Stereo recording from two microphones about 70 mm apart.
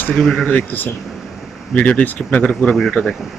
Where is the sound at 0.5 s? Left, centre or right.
Left.